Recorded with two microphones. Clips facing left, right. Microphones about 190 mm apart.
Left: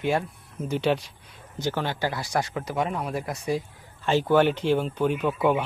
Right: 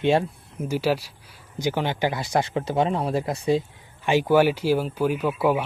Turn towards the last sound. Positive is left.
turn(degrees=-5)  # may be behind; listen again after turning